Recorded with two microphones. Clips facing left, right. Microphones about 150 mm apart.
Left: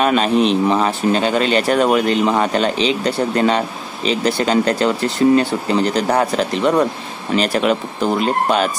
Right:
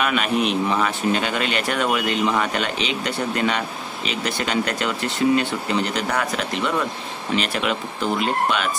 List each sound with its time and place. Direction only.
0.0 s speech: 35° left (ahead or behind)